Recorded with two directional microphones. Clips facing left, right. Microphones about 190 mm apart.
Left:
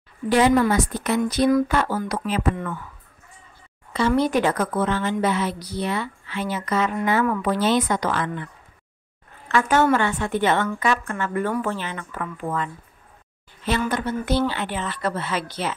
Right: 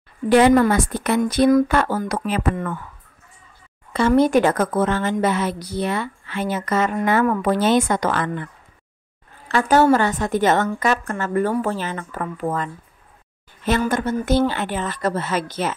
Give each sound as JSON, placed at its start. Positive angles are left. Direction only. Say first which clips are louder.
{"t": 0.3, "sound": "a woman's voice", "louder": "right 4 dB", "side_deg": -55}
{"t": 3.9, "sound": "a woman's voice", "louder": "right 4 dB", "side_deg": -50}
{"t": 9.5, "sound": "a woman's voice", "louder": "right 3 dB", "side_deg": -35}